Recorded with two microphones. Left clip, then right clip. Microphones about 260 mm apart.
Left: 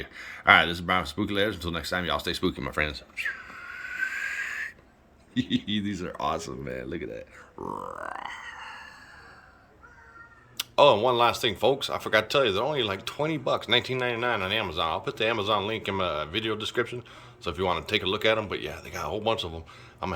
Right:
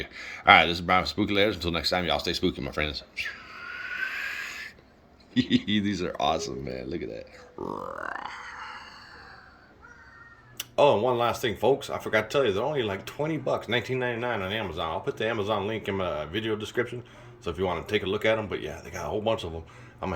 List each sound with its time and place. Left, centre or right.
0.0 s speech: centre
4.4 s owl: left
5.5 s speech: centre
6.7 s speech: centre
10.8 s speech: centre